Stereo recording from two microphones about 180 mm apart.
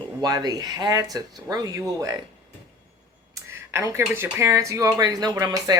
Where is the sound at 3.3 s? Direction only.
15° right (ahead or behind).